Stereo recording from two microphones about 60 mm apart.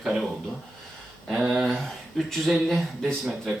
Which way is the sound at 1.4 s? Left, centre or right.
Centre.